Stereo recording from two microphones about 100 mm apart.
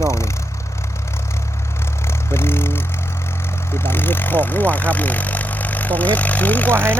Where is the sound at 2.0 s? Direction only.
25° left (ahead or behind).